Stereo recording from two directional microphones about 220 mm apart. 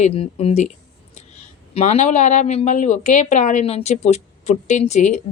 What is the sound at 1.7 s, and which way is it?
A woman's voice, 30° left (ahead or behind).